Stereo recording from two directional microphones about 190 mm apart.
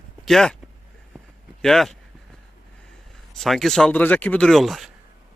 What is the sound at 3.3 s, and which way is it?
Speech, centre (ahead or behind).